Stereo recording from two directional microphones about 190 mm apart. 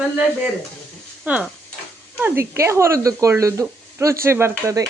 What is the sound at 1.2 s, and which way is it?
Speech, 5° right (ahead or behind).